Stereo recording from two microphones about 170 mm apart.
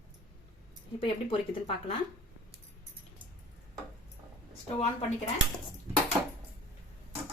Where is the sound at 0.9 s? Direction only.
30° left (ahead or behind).